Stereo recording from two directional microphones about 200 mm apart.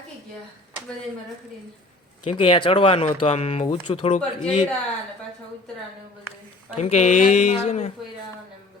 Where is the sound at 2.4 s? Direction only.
25° left (ahead or behind).